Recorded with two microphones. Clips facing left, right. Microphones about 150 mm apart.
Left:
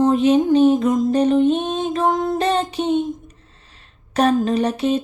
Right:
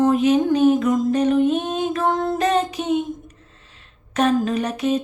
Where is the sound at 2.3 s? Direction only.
30° left (ahead or behind).